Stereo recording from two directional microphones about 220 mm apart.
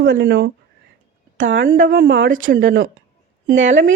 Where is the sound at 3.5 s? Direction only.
55° right (ahead or behind).